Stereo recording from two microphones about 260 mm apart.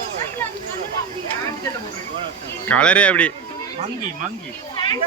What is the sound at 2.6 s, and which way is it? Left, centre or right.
Speech, centre.